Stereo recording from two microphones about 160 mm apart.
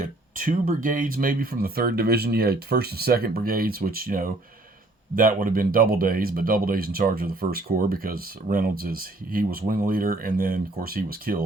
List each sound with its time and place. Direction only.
0.0 s speech: 55° right (ahead or behind)